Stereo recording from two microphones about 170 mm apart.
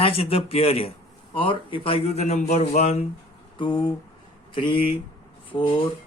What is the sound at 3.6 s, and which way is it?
Speech, 30° left (ahead or behind).